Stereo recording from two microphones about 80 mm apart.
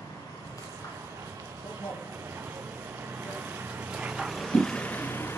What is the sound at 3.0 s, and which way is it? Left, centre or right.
Vehicle, right.